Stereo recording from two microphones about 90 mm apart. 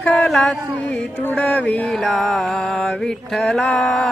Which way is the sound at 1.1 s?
20° left (ahead or behind).